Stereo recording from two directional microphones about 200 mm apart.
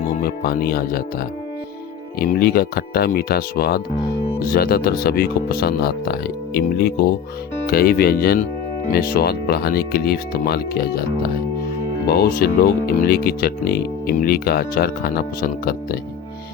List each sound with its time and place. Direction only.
0.2 s speech: 50° left (ahead or behind)
2.1 s speech: 50° left (ahead or behind)